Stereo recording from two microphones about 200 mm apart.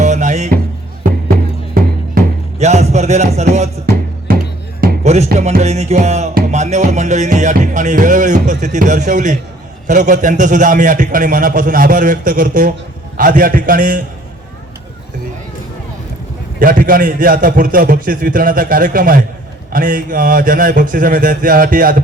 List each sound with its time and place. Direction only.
0.0 s music: 35° right (ahead or behind)
1.7 s music: 40° right (ahead or behind)
5.0 s music: 35° right (ahead or behind)
13.1 s a man's voice: 45° right (ahead or behind)
16.6 s a man's voice: 45° right (ahead or behind)